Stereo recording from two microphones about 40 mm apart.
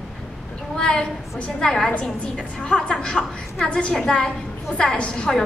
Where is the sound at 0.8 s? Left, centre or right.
Centre.